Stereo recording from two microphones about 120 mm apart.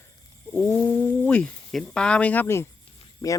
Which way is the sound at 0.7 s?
15° left (ahead or behind).